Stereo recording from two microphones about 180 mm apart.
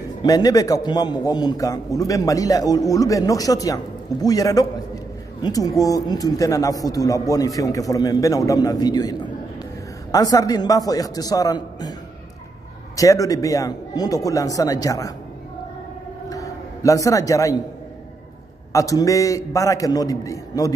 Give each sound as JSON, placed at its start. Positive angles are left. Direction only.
{"t": 0.2, "sound": "a man's voice", "side_deg": 20}
{"t": 12.9, "sound": "a man's voice", "side_deg": 20}
{"t": 16.3, "sound": "a sound", "side_deg": 20}
{"t": 18.7, "sound": "a man's voice", "side_deg": 20}